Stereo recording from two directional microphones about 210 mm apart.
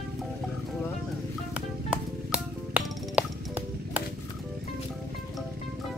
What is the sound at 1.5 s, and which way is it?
Music, 5° right (ahead or behind).